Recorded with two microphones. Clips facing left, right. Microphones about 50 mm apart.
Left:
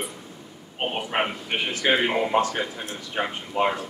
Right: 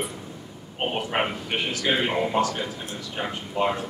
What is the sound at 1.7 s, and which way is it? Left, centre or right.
Speech, left.